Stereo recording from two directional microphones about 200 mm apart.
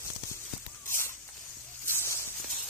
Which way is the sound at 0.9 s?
10° left (ahead or behind).